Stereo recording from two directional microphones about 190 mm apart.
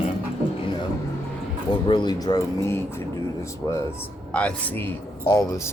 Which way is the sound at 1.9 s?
25° left (ahead or behind).